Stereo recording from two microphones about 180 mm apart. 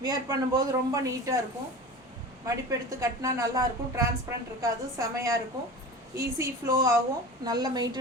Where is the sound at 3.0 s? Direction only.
20° right (ahead or behind).